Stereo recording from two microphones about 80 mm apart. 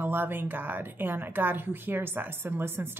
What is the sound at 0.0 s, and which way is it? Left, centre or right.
A woman's voice, right.